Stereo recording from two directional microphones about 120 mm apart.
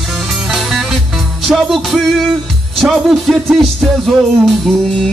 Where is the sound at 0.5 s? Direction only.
Centre (ahead or behind).